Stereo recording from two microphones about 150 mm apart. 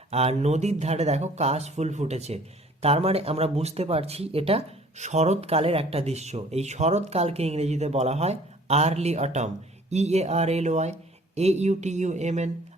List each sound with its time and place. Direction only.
0.1 s speech: 45° right (ahead or behind)